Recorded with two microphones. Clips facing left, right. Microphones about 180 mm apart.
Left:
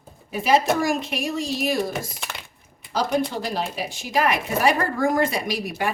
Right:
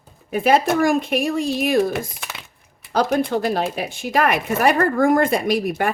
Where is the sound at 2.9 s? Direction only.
55° right (ahead or behind).